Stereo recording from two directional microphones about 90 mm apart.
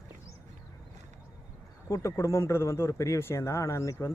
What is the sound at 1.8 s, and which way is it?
A man's voice, 35° left (ahead or behind).